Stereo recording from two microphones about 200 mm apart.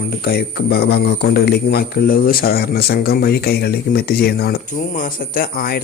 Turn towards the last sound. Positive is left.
turn(degrees=45)  # may be behind; listen again after turning